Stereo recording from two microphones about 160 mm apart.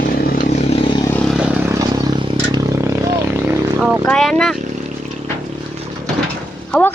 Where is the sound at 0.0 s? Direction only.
70° left (ahead or behind).